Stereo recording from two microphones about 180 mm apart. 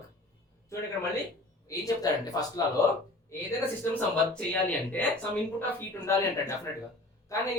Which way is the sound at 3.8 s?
10° left (ahead or behind).